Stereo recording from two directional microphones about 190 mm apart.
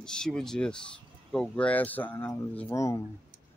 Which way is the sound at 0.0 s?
5° left (ahead or behind).